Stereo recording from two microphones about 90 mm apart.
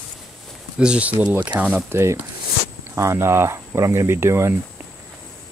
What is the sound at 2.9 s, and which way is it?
Speech, 30° right (ahead or behind).